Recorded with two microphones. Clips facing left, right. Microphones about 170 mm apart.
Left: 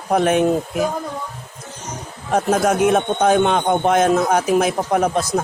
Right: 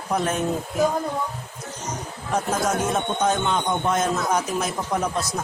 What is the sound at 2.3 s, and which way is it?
A man's voice, 65° left (ahead or behind).